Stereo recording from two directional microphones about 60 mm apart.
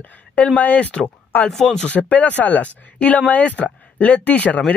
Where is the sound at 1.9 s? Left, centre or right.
Left.